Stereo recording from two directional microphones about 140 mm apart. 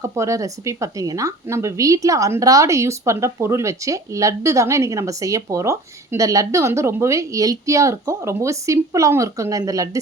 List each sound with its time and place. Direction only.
0.0 s speech: 20° right (ahead or behind)